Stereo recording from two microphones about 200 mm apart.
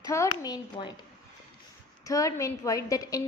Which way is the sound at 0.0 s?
15° left (ahead or behind).